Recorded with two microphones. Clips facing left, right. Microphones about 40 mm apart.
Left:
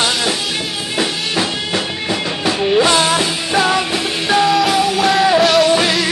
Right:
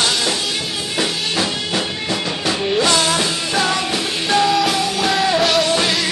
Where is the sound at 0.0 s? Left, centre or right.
Centre.